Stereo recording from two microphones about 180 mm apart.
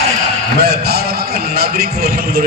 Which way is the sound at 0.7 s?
60° right (ahead or behind).